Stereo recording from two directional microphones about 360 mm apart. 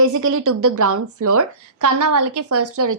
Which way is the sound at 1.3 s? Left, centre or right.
Right.